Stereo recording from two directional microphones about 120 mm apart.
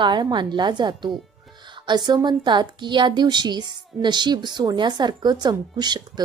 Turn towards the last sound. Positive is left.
turn(degrees=-35)  # may be behind; listen again after turning